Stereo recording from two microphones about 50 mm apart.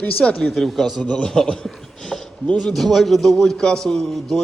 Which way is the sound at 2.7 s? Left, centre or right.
Centre.